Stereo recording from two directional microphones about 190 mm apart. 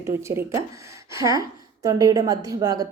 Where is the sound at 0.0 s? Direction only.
15° right (ahead or behind).